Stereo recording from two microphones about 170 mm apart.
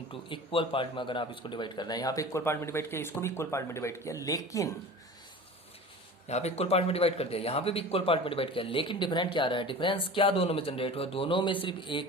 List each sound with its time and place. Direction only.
0.1 s speech: 30° left (ahead or behind)
6.2 s a man's voice: 40° left (ahead or behind)